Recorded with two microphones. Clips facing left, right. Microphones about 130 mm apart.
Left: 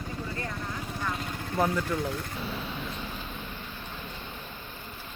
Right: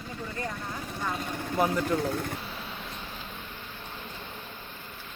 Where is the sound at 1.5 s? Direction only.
10° right (ahead or behind).